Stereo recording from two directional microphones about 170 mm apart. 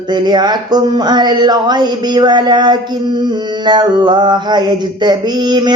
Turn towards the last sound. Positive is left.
turn(degrees=-25)  # may be behind; listen again after turning